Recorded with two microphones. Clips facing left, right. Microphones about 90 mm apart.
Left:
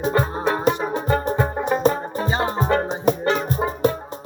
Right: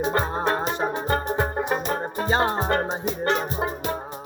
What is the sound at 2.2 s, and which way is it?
Music, 45° right (ahead or behind).